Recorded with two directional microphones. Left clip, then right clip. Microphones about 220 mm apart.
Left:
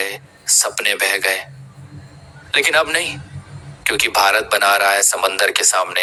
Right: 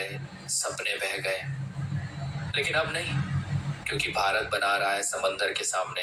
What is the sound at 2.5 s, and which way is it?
Speech, 45° left (ahead or behind).